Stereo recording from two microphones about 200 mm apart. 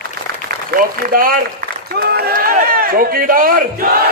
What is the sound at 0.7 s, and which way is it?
A man's voice, 45° right (ahead or behind).